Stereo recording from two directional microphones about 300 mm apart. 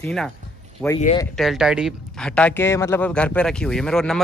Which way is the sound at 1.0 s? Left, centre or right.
Centre.